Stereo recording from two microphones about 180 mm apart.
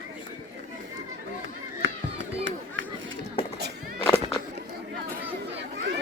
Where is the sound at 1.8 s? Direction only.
90° right.